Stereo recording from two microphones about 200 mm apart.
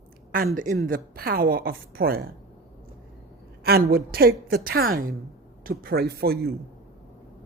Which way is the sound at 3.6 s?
50° right (ahead or behind).